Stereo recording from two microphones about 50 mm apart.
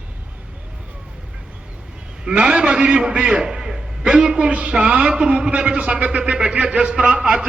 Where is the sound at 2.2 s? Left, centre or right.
Right.